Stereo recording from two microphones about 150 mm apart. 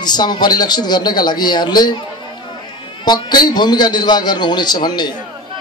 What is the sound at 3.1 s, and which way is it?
A man's voice, 30° left (ahead or behind).